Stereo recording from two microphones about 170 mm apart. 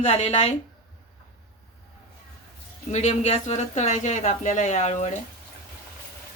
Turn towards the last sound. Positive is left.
turn(degrees=40)  # may be behind; listen again after turning